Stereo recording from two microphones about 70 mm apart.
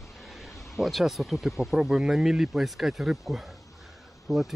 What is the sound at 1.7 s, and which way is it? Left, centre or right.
Speech, centre.